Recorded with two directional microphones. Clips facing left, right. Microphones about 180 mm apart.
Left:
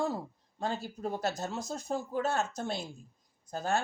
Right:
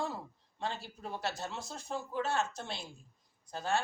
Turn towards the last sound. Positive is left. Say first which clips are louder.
# left 2 dB
turn(degrees=45)  # may be behind; listen again after turning